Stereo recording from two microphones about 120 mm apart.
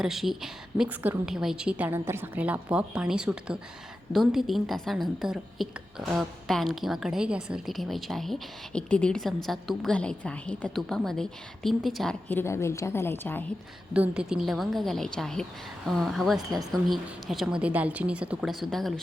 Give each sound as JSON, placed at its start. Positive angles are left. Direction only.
{"t": 0.0, "sound": "a woman's voice", "side_deg": -5}
{"t": 0.9, "sound": "a woman's voice", "side_deg": -15}
{"t": 12.3, "sound": "a woman's voice", "side_deg": 20}
{"t": 13.9, "sound": "a woman's voice", "side_deg": -10}